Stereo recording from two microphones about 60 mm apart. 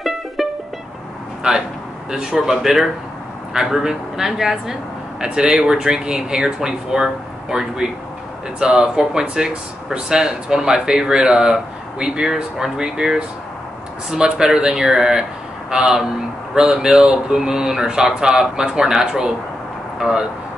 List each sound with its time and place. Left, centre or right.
0.0 s music: centre
1.5 s speech: centre